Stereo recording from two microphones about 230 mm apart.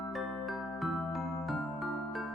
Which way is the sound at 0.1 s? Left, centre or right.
Centre.